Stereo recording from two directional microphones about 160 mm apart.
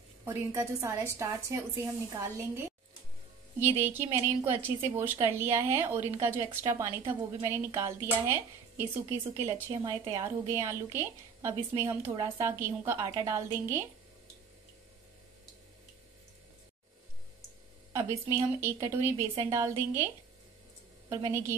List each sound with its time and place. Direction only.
0.2 s speech: 15° right (ahead or behind)
17.9 s speech: 20° right (ahead or behind)
21.1 s speech: 15° right (ahead or behind)